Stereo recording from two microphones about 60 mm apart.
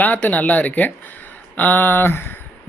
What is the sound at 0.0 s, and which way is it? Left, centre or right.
Speech, left.